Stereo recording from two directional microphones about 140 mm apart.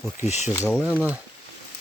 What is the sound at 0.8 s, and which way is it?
Speech, 10° right (ahead or behind).